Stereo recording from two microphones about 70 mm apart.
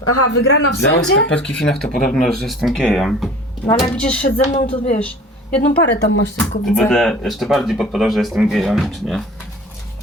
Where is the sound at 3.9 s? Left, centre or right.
Centre.